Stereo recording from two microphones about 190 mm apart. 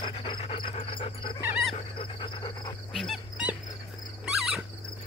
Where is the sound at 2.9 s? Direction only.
Centre (ahead or behind).